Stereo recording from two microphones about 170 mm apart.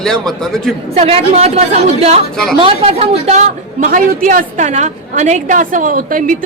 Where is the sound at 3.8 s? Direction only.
55° right (ahead or behind).